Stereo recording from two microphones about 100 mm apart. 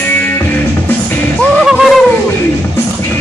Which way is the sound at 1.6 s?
5° right (ahead or behind).